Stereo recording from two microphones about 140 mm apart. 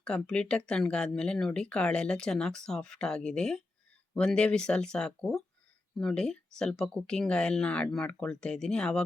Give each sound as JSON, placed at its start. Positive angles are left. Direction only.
{"t": 0.0, "sound": "speech", "side_deg": 5}